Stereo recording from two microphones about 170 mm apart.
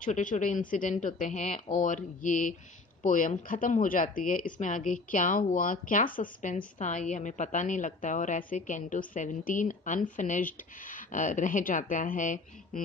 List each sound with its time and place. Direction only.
0.0 s speech: 50° left (ahead or behind)